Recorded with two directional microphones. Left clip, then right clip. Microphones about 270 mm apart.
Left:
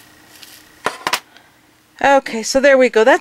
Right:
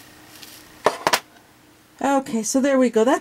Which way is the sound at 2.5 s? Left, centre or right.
Centre.